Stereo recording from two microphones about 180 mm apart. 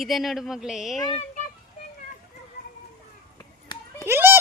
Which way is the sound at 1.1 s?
35° left (ahead or behind).